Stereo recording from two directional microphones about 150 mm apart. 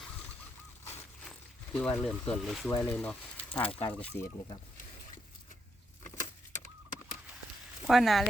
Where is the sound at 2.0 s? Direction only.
5° left (ahead or behind).